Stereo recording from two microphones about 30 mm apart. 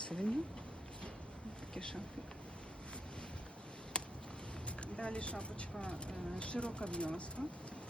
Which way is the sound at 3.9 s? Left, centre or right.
Left.